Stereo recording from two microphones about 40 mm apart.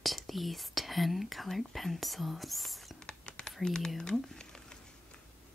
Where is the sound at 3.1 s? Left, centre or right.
Left.